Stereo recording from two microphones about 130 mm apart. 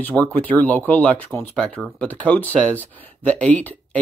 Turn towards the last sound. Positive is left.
turn(degrees=10)  # may be behind; listen again after turning